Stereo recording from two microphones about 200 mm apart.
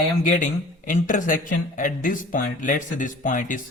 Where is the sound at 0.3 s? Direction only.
40° left (ahead or behind).